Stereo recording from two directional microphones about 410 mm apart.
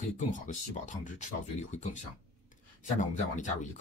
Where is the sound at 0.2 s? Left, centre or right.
Centre.